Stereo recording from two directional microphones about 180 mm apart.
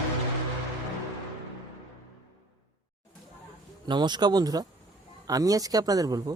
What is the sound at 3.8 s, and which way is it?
Speech, 25° right (ahead or behind).